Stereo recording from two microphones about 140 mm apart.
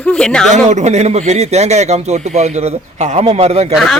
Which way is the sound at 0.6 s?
55° right (ahead or behind).